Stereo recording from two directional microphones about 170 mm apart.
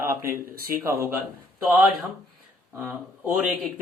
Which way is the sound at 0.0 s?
15° right (ahead or behind).